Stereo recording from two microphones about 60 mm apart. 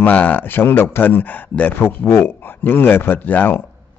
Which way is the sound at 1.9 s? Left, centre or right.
Left.